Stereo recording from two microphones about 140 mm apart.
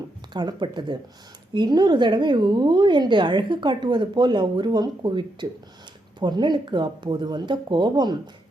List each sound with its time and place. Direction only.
0.3 s a woman's voice: 30° right (ahead or behind)